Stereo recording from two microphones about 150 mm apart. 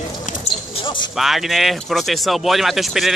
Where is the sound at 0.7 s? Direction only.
35° left (ahead or behind).